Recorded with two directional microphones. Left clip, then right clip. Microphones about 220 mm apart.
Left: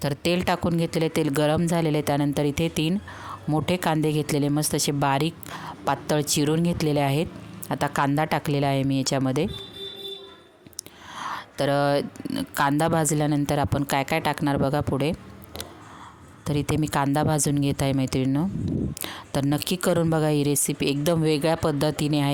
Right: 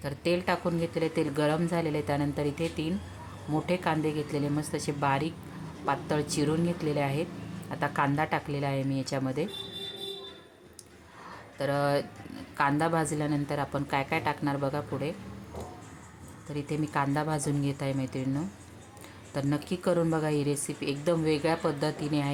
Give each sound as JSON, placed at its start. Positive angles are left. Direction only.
{"t": 0.0, "sound": "a woman's voice", "side_deg": 45}
{"t": 11.2, "sound": "a sound", "side_deg": 45}
{"t": 12.5, "sound": "a woman's voice", "side_deg": 50}
{"t": 16.5, "sound": "a woman's voice", "side_deg": 50}